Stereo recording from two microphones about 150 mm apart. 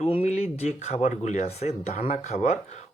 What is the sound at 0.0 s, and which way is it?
Speech, 40° left (ahead or behind).